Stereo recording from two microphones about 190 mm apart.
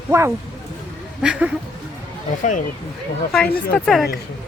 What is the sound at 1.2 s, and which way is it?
Speech, 5° right (ahead or behind).